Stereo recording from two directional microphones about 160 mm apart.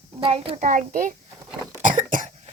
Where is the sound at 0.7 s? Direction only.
55° right (ahead or behind).